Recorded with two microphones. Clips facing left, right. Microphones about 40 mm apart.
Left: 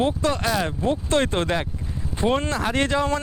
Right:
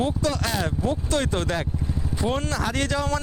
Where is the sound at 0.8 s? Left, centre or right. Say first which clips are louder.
Left 4 dB; left.